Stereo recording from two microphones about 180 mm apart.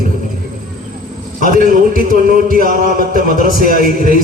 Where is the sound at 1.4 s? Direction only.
50° right (ahead or behind).